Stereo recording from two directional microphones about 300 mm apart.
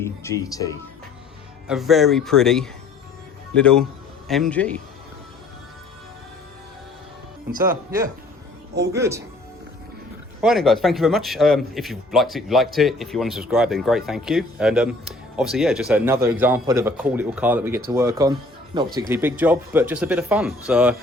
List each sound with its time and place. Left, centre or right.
0.0 s speech: centre
1.6 s a man's voice: centre
7.5 s speech: right
7.9 s speech: centre
10.4 s a man's voice: centre